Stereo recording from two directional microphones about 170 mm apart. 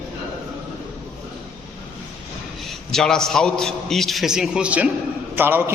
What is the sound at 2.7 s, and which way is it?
A man's voice, 5° left (ahead or behind).